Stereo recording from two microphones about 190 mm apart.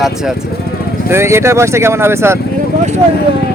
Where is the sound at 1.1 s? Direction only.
15° right (ahead or behind).